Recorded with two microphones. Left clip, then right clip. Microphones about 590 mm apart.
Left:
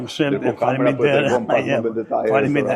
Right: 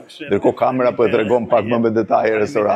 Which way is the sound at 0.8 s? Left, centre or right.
Right.